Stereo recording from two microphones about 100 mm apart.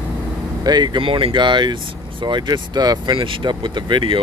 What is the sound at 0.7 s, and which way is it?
Speech, 45° right (ahead or behind).